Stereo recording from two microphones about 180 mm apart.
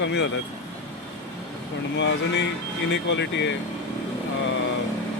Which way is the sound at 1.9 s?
80° left.